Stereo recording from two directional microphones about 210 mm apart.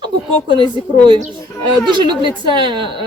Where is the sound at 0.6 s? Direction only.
20° right (ahead or behind).